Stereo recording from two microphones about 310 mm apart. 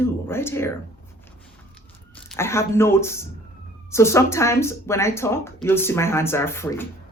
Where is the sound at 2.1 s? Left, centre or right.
Centre.